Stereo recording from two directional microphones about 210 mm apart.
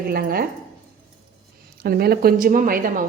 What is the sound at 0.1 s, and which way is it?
Speech, 45° right (ahead or behind).